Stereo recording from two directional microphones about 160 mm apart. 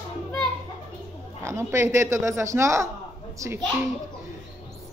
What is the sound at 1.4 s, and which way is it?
Speech, 15° right (ahead or behind).